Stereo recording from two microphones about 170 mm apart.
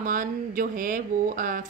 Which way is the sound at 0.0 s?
50° right (ahead or behind).